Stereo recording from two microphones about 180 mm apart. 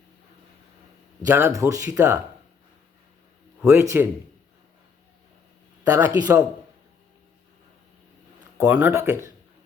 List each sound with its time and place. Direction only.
1.2 s speech: 15° right (ahead or behind)
3.6 s speech: 15° right (ahead or behind)
5.8 s speech: 20° right (ahead or behind)
8.5 s speech: 10° right (ahead or behind)